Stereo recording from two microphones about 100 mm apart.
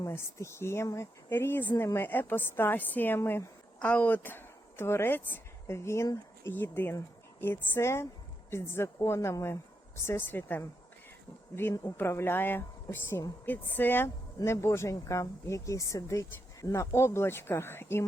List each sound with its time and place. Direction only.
0.0 s speech: 30° left (ahead or behind)
11.8 s speech: 25° left (ahead or behind)